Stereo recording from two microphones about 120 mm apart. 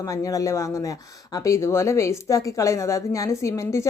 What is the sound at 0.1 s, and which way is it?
Speech, 30° left (ahead or behind).